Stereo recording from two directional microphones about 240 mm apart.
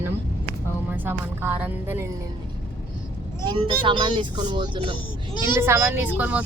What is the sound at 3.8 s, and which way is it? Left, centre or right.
A woman's voice, centre.